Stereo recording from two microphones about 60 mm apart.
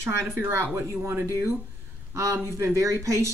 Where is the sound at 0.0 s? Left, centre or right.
Right.